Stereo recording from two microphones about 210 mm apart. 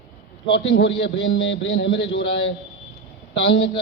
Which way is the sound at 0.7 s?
60° left (ahead or behind).